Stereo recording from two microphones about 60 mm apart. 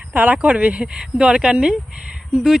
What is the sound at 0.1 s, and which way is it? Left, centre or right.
Speech, right.